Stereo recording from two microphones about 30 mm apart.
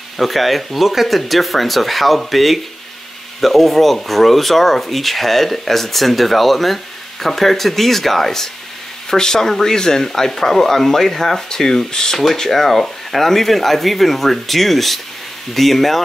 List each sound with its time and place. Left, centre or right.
0.2 s speech: centre
12.2 s speech: centre